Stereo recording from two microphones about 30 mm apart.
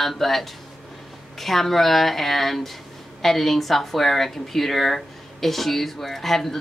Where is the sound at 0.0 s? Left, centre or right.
Centre.